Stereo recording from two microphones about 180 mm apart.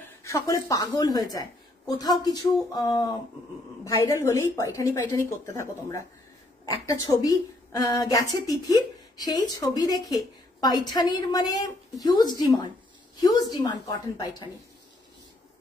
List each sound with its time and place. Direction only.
0.2 s a woman's voice: 20° left (ahead or behind)